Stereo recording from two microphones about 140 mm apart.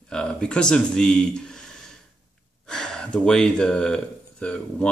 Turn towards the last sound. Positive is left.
turn(degrees=5)  # may be behind; listen again after turning